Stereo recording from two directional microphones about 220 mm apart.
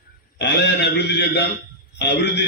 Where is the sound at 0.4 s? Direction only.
50° left (ahead or behind).